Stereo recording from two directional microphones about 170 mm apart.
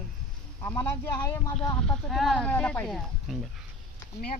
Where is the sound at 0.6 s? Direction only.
15° left (ahead or behind).